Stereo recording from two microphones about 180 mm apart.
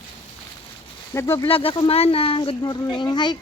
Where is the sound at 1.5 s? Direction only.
30° left (ahead or behind).